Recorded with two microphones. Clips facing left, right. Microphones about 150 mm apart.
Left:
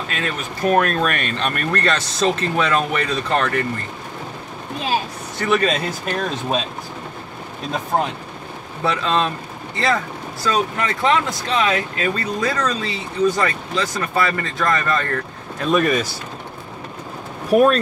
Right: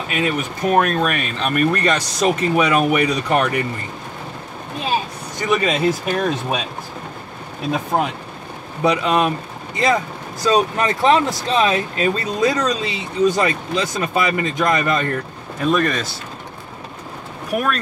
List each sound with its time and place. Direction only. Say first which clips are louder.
0.1 s speech: right 9 dB; 15° right (ahead or behind)
5.4 s speech: right 1 dB; 10° right (ahead or behind)
8.8 s speech: right 3 dB; 15° right (ahead or behind)
15.6 s speech: left 1 dB; centre (ahead or behind)
17.5 s speech: left 9 dB; 30° left (ahead or behind)